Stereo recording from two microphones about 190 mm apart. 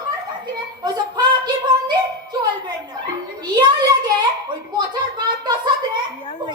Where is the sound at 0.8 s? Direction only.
20° right (ahead or behind).